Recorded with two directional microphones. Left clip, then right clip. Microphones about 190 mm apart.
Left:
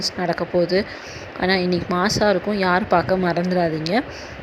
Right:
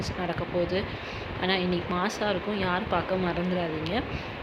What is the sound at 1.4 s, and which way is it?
Speech, 35° left (ahead or behind).